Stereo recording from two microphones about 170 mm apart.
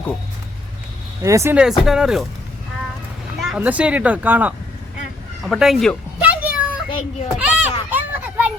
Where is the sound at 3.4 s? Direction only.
5° right (ahead or behind).